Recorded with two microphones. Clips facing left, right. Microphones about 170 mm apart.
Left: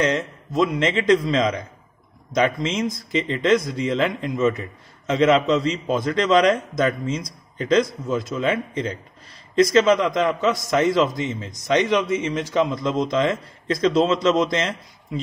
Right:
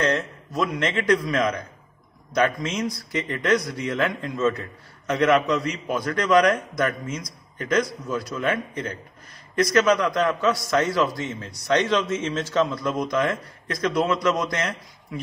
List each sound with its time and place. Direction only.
0.0 s speech: 15° left (ahead or behind)